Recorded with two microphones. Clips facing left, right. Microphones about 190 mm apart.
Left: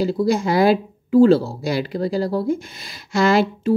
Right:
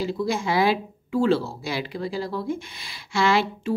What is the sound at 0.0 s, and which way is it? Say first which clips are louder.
Speech: left 6 dB; 40° left (ahead or behind).